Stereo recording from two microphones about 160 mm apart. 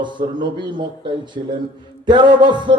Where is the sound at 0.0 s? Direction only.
30° right (ahead or behind).